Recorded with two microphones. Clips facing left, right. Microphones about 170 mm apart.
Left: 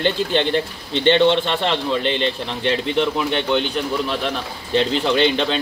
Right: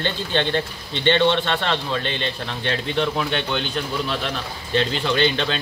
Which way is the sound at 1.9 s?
25° left (ahead or behind).